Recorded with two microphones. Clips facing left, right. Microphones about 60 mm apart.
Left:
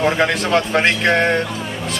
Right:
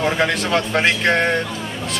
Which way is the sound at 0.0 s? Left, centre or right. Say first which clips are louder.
Left 2 dB; centre.